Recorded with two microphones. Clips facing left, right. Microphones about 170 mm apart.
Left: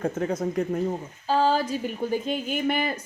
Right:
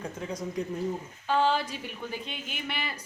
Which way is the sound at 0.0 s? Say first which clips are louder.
Left 9 dB; 55° left (ahead or behind).